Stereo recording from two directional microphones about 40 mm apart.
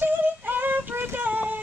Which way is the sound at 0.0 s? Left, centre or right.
Right.